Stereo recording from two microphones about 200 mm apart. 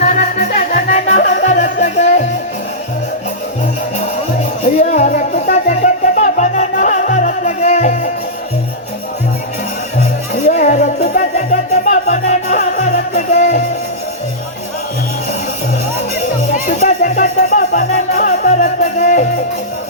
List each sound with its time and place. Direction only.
0.0 s music: 35° left (ahead or behind)
4.8 s music: 35° left (ahead or behind)
10.4 s music: 35° left (ahead or behind)
16.5 s music: 40° left (ahead or behind)